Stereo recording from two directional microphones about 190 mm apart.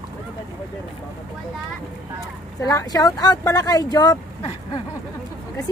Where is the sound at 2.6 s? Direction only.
15° left (ahead or behind).